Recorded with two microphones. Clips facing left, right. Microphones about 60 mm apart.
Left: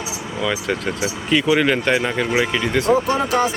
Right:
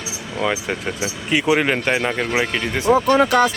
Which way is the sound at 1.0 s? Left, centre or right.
Right.